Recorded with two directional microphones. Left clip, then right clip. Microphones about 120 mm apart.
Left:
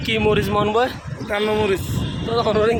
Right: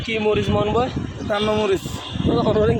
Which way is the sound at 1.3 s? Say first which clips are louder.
Even; 65° right (ahead or behind).